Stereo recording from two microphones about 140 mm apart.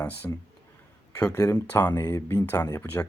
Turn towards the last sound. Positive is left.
turn(degrees=15)  # may be behind; listen again after turning